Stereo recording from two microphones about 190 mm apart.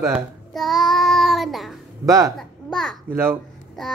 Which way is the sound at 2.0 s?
15° right (ahead or behind).